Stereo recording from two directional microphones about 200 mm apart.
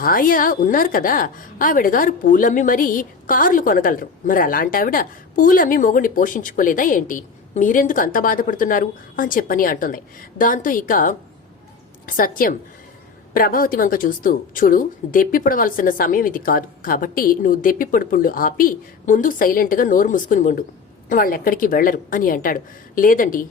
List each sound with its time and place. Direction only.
0.0 s a woman's voice: 45° left (ahead or behind)